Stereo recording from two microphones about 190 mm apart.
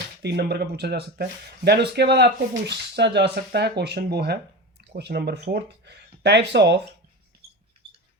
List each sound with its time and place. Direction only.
0.2 s speech: 60° right (ahead or behind)